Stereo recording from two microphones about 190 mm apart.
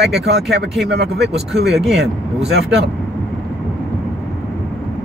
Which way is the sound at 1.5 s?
Centre (ahead or behind).